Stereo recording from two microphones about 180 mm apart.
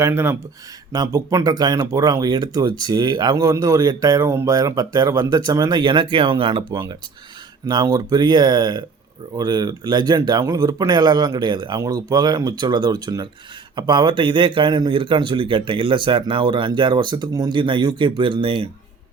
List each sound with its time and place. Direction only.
0.0 s speech: 15° right (ahead or behind)